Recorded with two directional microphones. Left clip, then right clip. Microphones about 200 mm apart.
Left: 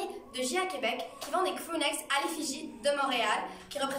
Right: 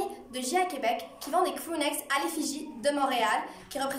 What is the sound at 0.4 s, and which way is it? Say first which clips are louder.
A woman's voice: right 3 dB; 30° right (ahead or behind).